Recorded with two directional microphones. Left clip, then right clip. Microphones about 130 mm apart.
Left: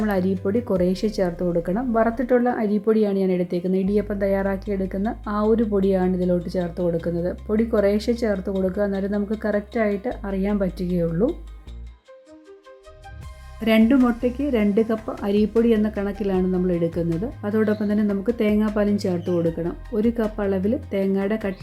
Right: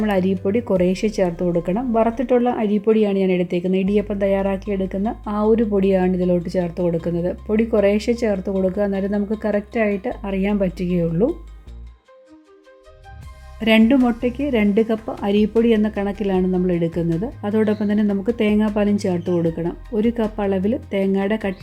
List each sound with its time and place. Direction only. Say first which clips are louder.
0.0 s speech: right 3 dB; 25° right (ahead or behind)
13.7 s speech: right 3 dB; 20° right (ahead or behind)